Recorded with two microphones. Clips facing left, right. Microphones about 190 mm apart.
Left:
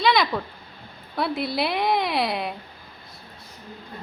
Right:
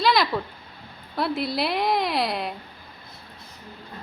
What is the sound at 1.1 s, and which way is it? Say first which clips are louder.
A woman's voice: even; centre (ahead or behind).